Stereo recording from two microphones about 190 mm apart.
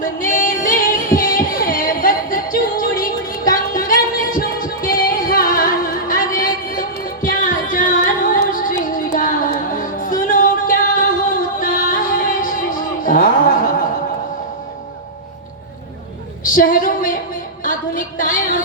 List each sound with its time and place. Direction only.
0.0 s music: 45° left (ahead or behind)
16.4 s a sound: 45° left (ahead or behind)
17.6 s music: 45° left (ahead or behind)